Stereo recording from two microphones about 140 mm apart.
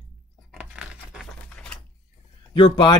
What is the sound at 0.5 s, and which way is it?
Tearing, 5° right (ahead or behind).